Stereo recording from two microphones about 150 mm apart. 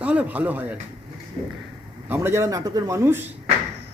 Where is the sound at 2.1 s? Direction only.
15° right (ahead or behind).